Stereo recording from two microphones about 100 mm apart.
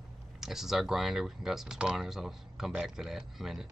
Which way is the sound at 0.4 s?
5° right (ahead or behind).